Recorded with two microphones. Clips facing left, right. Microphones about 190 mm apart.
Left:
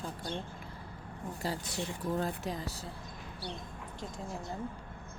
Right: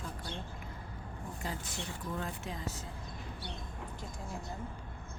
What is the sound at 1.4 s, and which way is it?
Speech, 35° left (ahead or behind).